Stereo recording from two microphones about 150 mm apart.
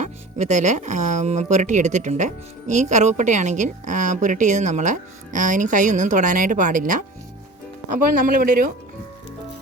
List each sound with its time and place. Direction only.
0.0 s speech: 50° right (ahead or behind)
7.9 s speech: 70° right (ahead or behind)